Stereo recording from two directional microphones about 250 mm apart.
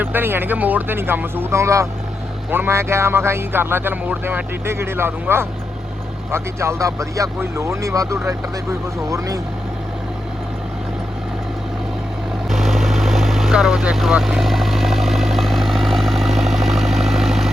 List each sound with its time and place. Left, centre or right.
0.0 s speech: centre
12.5 s vehicle: centre